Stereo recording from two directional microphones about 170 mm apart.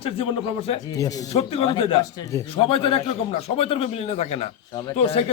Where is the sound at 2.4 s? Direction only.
30° left (ahead or behind).